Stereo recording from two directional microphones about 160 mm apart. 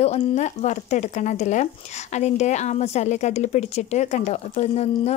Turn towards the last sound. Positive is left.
turn(degrees=40)  # may be behind; listen again after turning